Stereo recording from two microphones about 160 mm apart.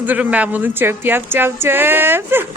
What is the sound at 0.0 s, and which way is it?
Speech, 10° right (ahead or behind).